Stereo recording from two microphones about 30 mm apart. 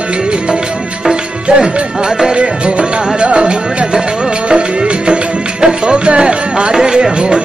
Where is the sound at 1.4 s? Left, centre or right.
Right.